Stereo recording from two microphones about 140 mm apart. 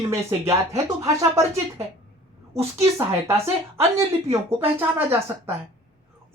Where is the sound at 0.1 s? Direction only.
20° right (ahead or behind).